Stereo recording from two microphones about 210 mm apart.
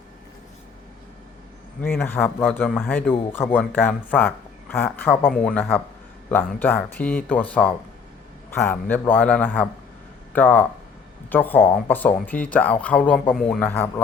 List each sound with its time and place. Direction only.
1.8 s speech: 10° left (ahead or behind)